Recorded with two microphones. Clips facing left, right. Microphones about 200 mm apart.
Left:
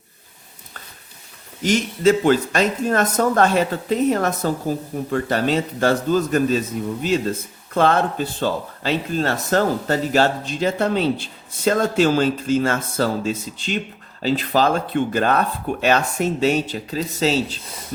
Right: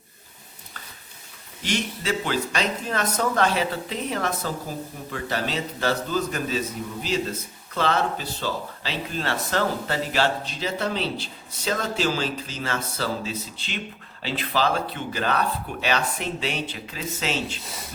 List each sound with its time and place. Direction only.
1.6 s speech: 45° left (ahead or behind)
7.7 s speech: 50° left (ahead or behind)